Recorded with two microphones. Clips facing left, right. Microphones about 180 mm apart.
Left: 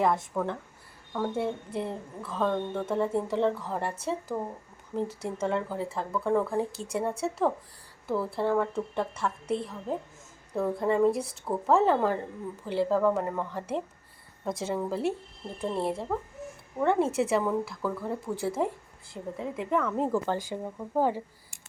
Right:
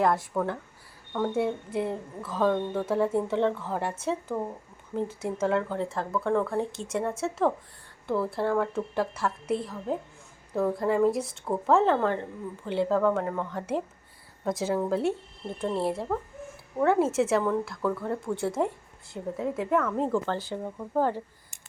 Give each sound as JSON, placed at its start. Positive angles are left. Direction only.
{"t": 0.0, "sound": "a woman's voice", "side_deg": 0}
{"t": 5.2, "sound": "a woman's voice", "side_deg": 0}
{"t": 6.7, "sound": "speech", "side_deg": 35}
{"t": 7.2, "sound": "a woman's voice", "side_deg": 0}
{"t": 20.1, "sound": "speech", "side_deg": 10}